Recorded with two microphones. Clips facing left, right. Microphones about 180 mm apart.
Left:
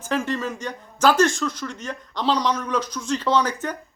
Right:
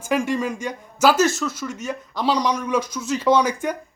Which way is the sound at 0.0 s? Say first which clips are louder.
Right 3 dB; 10° right (ahead or behind).